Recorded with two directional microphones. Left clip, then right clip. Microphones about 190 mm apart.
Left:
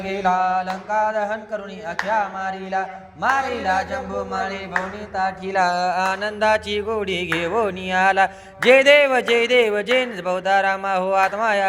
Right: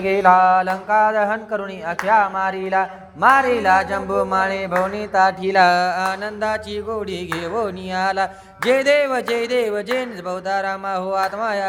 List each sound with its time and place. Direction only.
0.0 s speech: 45° right (ahead or behind)
5.5 s a sound: 30° right (ahead or behind)
5.8 s speech: 10° right (ahead or behind)